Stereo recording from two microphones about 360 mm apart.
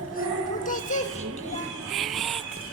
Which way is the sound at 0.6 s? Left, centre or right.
Left.